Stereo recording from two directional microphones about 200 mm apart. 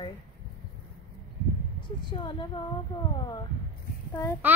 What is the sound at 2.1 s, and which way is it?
A woman's voice, 25° left (ahead or behind).